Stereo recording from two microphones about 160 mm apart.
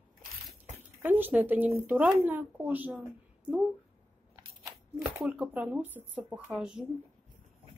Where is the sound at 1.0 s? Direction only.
10° right (ahead or behind).